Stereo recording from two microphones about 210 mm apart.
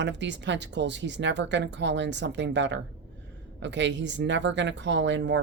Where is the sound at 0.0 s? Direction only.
55° right (ahead or behind).